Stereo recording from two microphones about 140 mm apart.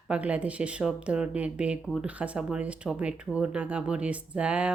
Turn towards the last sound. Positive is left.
turn(degrees=-10)  # may be behind; listen again after turning